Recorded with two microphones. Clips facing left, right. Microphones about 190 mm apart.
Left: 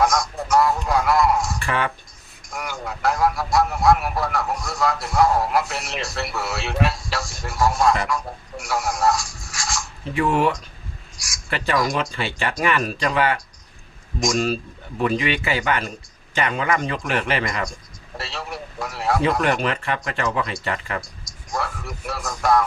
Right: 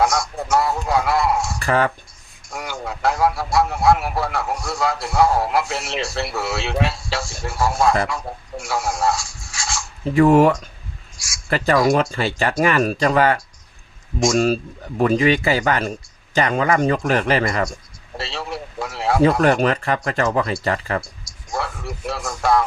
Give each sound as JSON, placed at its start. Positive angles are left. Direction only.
{"t": 0.0, "sound": "a sound", "side_deg": -25}
{"t": 1.6, "sound": "speech", "side_deg": -40}
{"t": 2.5, "sound": "a man's voice", "side_deg": -30}
{"t": 10.2, "sound": "a man's voice", "side_deg": -45}
{"t": 14.3, "sound": "a man's voice", "side_deg": -45}
{"t": 18.2, "sound": "a sound", "side_deg": -30}
{"t": 19.3, "sound": "a man's voice", "side_deg": -35}